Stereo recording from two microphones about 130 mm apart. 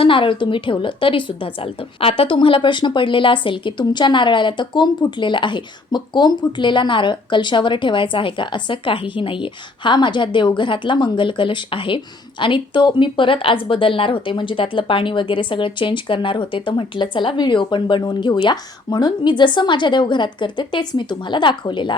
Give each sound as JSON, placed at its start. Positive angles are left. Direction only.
{"t": 0.0, "sound": "a woman's voice", "side_deg": 40}